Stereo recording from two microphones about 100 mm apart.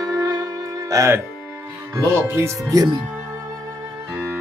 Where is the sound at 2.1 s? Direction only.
20° right (ahead or behind).